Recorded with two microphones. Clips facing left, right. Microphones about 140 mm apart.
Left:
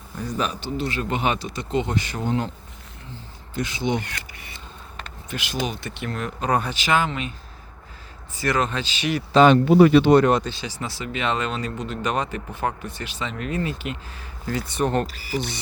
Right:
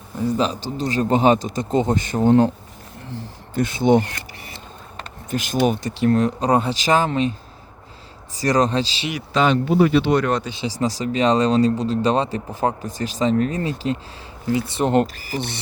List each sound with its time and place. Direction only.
0.6 s speech: 40° right (ahead or behind)
3.5 s speech: 50° right (ahead or behind)
4.0 s speech: 35° right (ahead or behind)
8.4 s speech: 35° right (ahead or behind)
9.4 s speech: 65° left (ahead or behind)
10.4 s speech: 20° right (ahead or behind)
10.7 s speech: 35° right (ahead or behind)
15.0 s speech: 45° right (ahead or behind)